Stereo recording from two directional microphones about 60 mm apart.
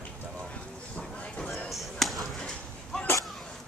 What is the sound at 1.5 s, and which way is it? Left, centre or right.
Basketball bounce, centre.